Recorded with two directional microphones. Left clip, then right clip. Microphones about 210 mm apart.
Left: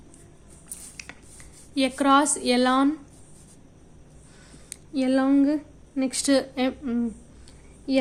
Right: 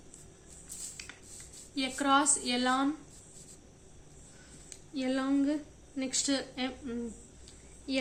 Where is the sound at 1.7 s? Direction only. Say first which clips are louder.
Left 8 dB; 45° left (ahead or behind).